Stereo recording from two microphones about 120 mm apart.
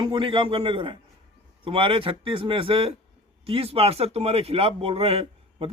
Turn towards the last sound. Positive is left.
turn(degrees=-55)  # may be behind; listen again after turning